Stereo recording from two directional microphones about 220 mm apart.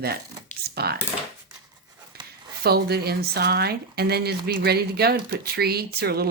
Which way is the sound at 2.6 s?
45° right (ahead or behind).